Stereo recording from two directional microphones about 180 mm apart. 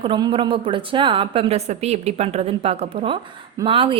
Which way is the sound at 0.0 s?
30° right (ahead or behind).